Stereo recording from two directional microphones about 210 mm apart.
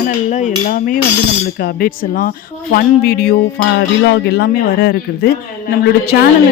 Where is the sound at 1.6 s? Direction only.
45° left (ahead or behind).